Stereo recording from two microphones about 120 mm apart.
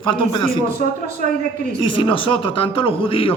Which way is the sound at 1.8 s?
45° left (ahead or behind).